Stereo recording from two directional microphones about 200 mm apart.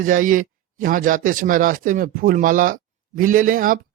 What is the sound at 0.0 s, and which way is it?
Speech, 40° right (ahead or behind).